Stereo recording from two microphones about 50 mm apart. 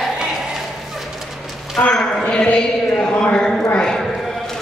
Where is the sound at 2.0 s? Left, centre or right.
Centre.